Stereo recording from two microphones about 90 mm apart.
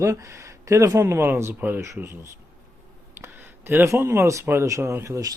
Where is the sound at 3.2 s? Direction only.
25° right (ahead or behind).